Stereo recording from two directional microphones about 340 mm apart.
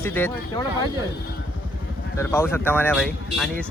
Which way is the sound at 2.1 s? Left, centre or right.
Centre.